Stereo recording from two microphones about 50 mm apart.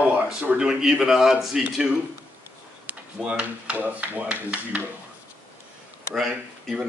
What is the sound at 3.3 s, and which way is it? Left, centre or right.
Speech, right.